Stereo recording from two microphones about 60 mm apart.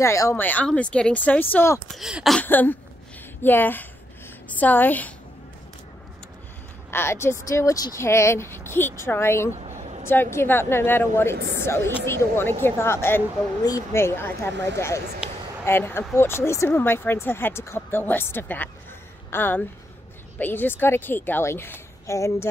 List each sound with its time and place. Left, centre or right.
0.0 s speech: left
0.4 s speech: left
0.7 s a woman's voice: centre
6.9 s speech: left
7.4 s a woman's voice: left
22.0 s speech: left